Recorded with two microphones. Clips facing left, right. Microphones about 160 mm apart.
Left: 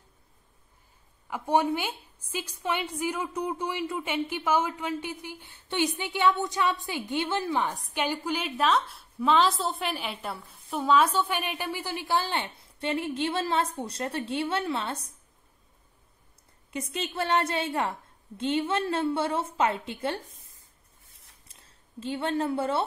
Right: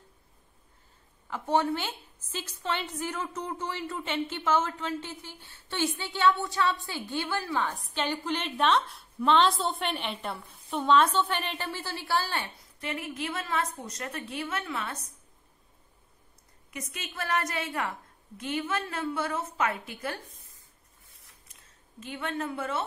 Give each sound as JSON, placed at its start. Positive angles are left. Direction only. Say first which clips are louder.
{"t": 1.3, "sound": "a woman's voice", "louder": "left 2 dB", "side_deg": 10}
{"t": 16.7, "sound": "a woman's voice", "louder": "left 7 dB", "side_deg": 30}
{"t": 21.5, "sound": "speech", "louder": "left 1 dB", "side_deg": 30}